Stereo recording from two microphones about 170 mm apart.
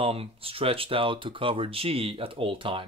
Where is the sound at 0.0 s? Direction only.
35° right (ahead or behind).